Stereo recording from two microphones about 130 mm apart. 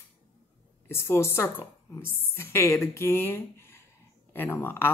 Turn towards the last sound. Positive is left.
turn(degrees=20)  # may be behind; listen again after turning